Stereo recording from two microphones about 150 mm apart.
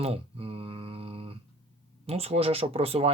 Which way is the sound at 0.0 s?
40° right (ahead or behind).